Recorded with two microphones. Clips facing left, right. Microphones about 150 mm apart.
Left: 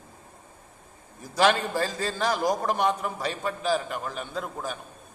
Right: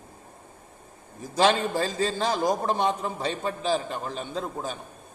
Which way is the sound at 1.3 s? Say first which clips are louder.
Right 1 dB; 20° right (ahead or behind).